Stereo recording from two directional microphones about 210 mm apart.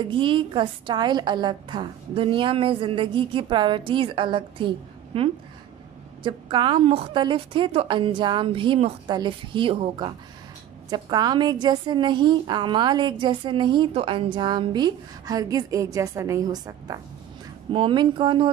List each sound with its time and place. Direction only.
0.0 s a woman's voice: 25° right (ahead or behind)